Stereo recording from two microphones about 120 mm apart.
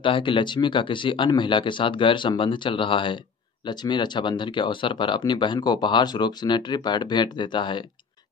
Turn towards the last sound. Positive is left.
turn(degrees=40)  # may be behind; listen again after turning